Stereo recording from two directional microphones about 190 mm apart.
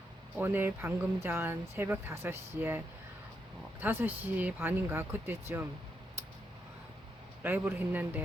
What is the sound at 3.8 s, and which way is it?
Speech, 10° right (ahead or behind).